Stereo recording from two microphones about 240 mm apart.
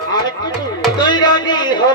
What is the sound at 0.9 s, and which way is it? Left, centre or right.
Music, centre.